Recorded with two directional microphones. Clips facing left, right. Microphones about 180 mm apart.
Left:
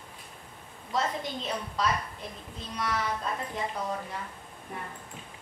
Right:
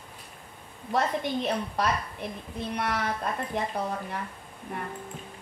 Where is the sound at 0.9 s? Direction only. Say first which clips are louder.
Right 4 dB; 60° right (ahead or behind).